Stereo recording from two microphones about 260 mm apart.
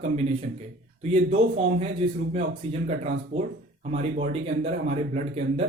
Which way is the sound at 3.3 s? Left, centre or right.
Right.